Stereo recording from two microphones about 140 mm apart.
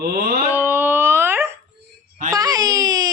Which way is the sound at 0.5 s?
15° right (ahead or behind).